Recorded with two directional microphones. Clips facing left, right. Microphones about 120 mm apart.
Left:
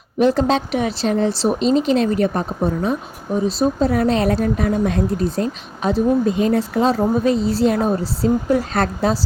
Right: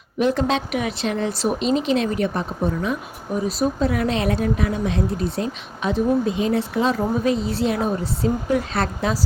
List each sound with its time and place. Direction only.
0.2 s speech: 35° left (ahead or behind)